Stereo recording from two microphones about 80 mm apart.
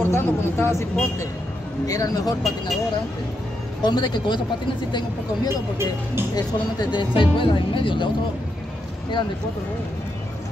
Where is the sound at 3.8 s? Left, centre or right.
Left.